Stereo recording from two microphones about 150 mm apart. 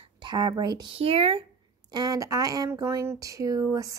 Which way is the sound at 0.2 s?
30° right (ahead or behind).